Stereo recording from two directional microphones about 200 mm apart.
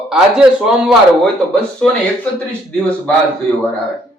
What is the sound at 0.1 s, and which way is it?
Speech, 5° right (ahead or behind).